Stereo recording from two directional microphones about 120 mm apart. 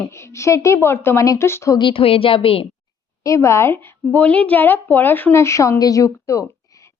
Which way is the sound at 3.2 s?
25° left (ahead or behind).